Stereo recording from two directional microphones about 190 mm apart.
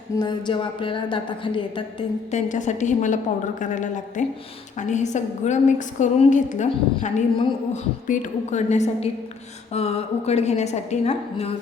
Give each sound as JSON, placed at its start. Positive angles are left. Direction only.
{"t": 0.2, "sound": "a woman's voice", "side_deg": 25}
{"t": 2.5, "sound": "a woman's voice", "side_deg": 40}